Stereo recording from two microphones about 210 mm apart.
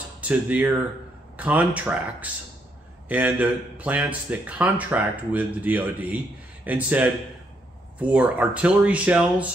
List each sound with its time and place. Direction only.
0.2 s speech: 5° right (ahead or behind)